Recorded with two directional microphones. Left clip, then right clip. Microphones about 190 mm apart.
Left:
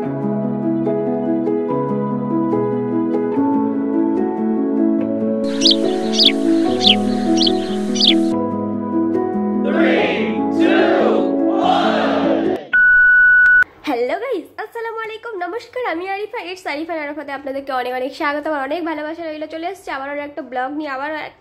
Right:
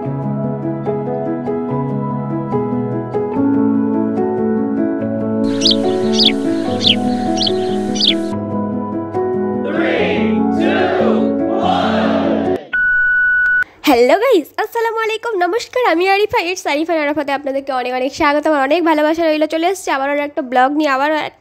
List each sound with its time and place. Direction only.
5.4 s music: centre (ahead or behind)
9.8 s music: centre (ahead or behind)
13.8 s telephone dialing: 45° right (ahead or behind)
15.8 s a woman's voice: 50° right (ahead or behind)
18.2 s a woman's voice: 35° right (ahead or behind); by 21.1 s 55° right (ahead or behind)